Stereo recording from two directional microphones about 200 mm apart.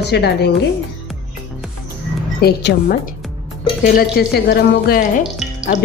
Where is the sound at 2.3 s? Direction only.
50° left (ahead or behind).